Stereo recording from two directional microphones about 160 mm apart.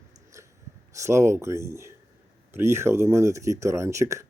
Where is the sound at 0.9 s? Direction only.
20° right (ahead or behind).